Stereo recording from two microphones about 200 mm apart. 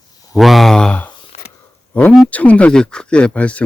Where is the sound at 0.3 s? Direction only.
Centre (ahead or behind).